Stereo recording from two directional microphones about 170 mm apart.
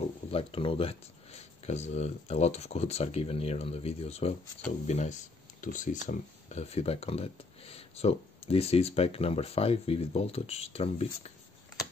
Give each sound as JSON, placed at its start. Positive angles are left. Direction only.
{"t": 0.0, "sound": "speech", "side_deg": 35}